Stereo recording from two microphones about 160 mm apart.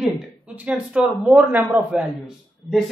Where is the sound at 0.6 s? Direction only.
10° right (ahead or behind).